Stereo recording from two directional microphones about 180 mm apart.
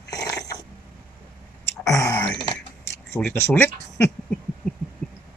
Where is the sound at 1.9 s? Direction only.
15° left (ahead or behind).